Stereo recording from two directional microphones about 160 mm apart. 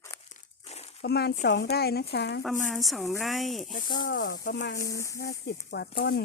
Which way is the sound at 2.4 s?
Centre (ahead or behind).